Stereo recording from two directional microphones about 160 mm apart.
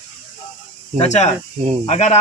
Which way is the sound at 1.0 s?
45° left (ahead or behind).